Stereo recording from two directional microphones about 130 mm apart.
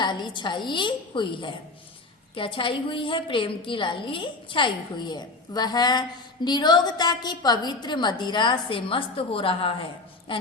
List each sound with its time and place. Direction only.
0.0 s a woman's voice: 35° left (ahead or behind)